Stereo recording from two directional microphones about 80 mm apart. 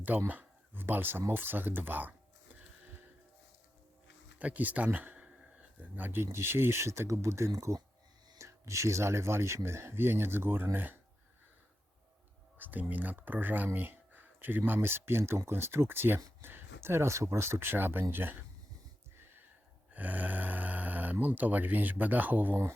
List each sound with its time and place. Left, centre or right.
0.3 s speech: right
4.4 s speech: centre
12.5 s a sound: right
12.9 s speech: right
19.9 s speech: right